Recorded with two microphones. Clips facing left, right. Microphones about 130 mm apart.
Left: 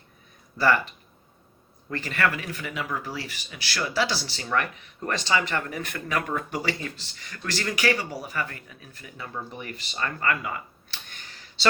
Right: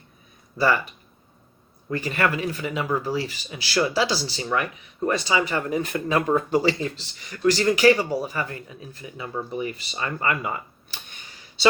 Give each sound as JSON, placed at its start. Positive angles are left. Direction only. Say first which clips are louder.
{"t": 1.9, "sound": "speech", "louder": "right 3 dB", "side_deg": -15}